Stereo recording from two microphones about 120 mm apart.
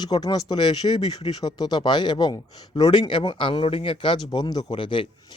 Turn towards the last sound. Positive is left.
turn(degrees=45)  # may be behind; listen again after turning